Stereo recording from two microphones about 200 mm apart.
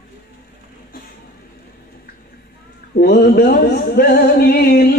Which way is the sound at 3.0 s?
50° left (ahead or behind).